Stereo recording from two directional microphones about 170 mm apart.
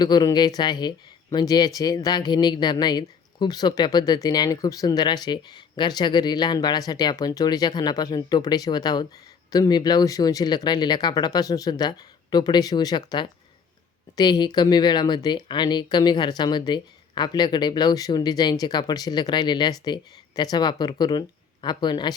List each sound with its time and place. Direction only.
0.0 s speech: 25° left (ahead or behind)